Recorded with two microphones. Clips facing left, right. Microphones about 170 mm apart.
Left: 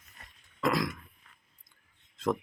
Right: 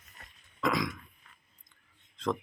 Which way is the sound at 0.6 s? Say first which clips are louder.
Left 1 dB; centre (ahead or behind).